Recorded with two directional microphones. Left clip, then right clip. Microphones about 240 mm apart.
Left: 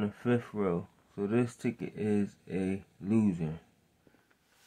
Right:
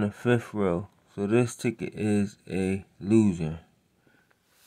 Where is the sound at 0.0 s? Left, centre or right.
Right.